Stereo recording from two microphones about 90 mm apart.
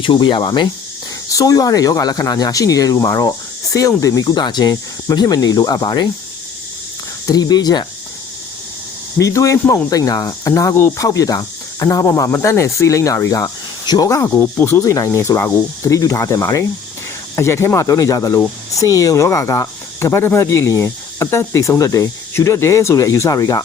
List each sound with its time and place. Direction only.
0.0 s speech: 65° left (ahead or behind)
1.3 s speech: 40° left (ahead or behind)
4.2 s speech: 55° left (ahead or behind)
7.3 s speech: 45° left (ahead or behind)
9.1 s speech: 35° left (ahead or behind)
14.3 s speech: 25° left (ahead or behind)
14.8 s speech: 35° left (ahead or behind)